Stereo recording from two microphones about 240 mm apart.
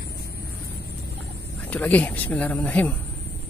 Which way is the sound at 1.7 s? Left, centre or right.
Centre.